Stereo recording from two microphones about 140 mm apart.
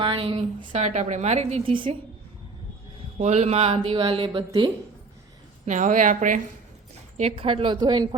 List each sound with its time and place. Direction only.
0.0 s a woman's voice: 40° right (ahead or behind)
3.2 s speech: 55° right (ahead or behind); by 4.7 s 35° right (ahead or behind)
5.6 s a woman's voice: 65° right (ahead or behind)
7.2 s speech: 45° right (ahead or behind)